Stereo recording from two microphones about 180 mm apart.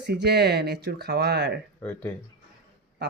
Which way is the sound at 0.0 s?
70° right (ahead or behind).